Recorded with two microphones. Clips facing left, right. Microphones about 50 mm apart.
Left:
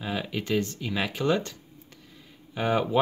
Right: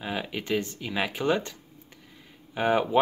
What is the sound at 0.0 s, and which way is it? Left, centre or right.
Speech, centre.